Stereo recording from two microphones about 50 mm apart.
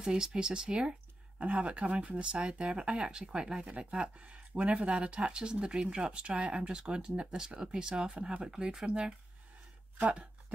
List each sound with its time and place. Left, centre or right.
0.0 s speech: centre